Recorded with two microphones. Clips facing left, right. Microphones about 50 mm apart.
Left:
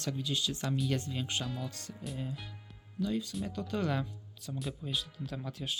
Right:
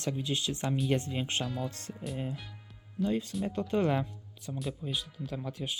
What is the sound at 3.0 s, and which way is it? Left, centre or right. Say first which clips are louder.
Speech: right 3 dB; right.